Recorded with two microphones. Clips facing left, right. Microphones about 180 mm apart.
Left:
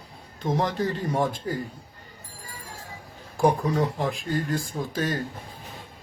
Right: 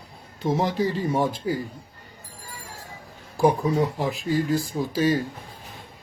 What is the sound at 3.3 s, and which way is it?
Speech, 5° right (ahead or behind).